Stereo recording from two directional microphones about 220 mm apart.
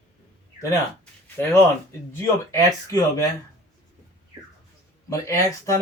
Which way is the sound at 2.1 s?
15° left (ahead or behind).